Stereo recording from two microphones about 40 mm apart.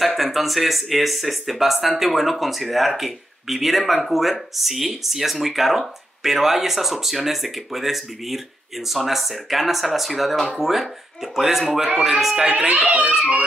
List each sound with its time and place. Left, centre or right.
0.0 s speech: centre
12.5 s a child's voice: right